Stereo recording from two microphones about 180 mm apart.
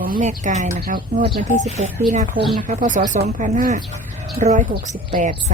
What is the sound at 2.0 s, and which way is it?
A woman's voice, 45° right (ahead or behind).